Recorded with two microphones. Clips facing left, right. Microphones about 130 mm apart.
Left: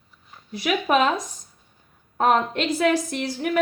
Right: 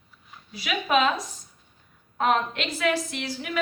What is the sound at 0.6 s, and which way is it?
A woman's voice, 45° left (ahead or behind).